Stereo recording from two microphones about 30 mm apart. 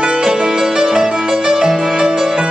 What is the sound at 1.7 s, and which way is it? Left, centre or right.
Music, centre.